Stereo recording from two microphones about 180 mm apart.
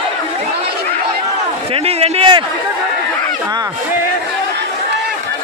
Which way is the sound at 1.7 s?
35° right (ahead or behind).